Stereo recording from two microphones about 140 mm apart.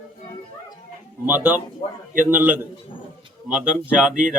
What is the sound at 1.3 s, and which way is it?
Speech, 10° right (ahead or behind).